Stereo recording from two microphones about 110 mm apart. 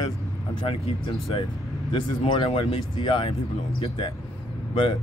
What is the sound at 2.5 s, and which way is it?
Speech, 70° left (ahead or behind).